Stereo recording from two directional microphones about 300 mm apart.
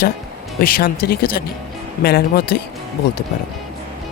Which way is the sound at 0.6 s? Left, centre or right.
Left.